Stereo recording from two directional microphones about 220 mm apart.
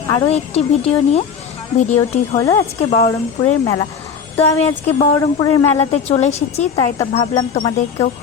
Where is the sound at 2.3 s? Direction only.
15° left (ahead or behind).